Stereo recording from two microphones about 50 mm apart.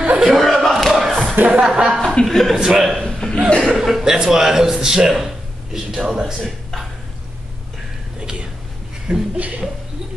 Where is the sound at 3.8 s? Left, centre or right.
Centre.